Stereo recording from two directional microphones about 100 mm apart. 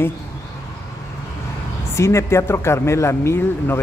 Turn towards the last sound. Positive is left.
turn(degrees=25)  # may be behind; listen again after turning